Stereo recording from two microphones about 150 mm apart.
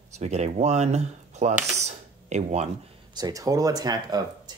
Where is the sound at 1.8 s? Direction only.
50° right (ahead or behind).